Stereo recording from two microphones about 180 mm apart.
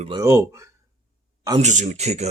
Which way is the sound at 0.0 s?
20° right (ahead or behind).